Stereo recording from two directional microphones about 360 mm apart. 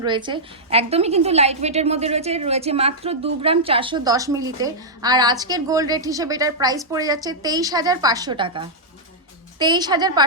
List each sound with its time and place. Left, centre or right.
0.0 s a woman's voice: centre